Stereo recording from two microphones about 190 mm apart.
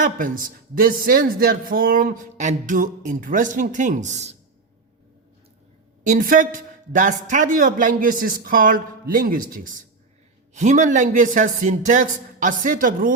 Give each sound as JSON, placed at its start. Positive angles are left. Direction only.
{"t": 0.0, "sound": "a man's voice", "side_deg": -45}
{"t": 6.0, "sound": "a man's voice", "side_deg": -45}